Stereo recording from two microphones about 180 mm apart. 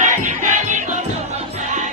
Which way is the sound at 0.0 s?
45° right (ahead or behind).